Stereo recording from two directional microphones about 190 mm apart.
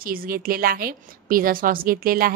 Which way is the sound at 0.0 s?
50° right (ahead or behind).